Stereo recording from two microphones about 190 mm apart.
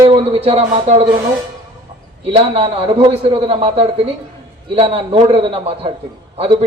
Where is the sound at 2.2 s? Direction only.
30° right (ahead or behind).